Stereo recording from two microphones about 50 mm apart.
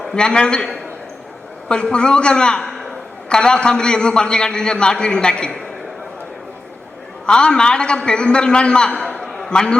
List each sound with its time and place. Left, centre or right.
0.0 s a man's voice: centre
7.3 s a man's voice: centre
9.2 s a sound: centre
9.5 s a man's voice: centre